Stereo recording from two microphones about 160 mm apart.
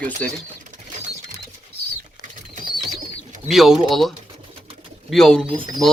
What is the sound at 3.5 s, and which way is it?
Speech, centre (ahead or behind).